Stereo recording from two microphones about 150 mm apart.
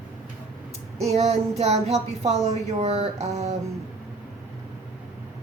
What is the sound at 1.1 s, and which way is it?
Speech, 45° right (ahead or behind).